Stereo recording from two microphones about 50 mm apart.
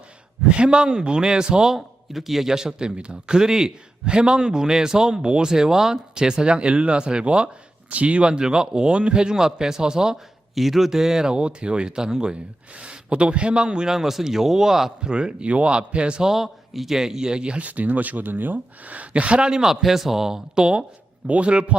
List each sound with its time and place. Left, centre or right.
0.5 s speech: centre
1.7 s speech: centre; by 16.3 s right
16.3 s a man's voice: centre
19.7 s a man's voice: centre; by 21.8 s right